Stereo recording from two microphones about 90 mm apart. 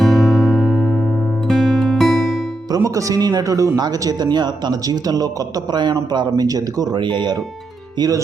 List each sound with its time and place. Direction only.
0.0 s music: centre (ahead or behind)
2.8 s speech: 40° right (ahead or behind); by 7.3 s 60° right (ahead or behind)
7.9 s speech: 45° right (ahead or behind)